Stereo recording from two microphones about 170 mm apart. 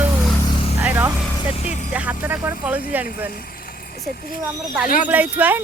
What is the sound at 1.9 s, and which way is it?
Speech, 10° right (ahead or behind).